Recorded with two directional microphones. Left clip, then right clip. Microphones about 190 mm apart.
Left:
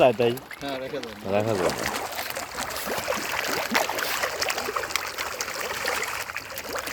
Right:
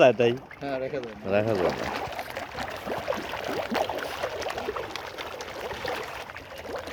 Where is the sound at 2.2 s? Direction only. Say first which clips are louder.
Left 3 dB; 35° left (ahead or behind).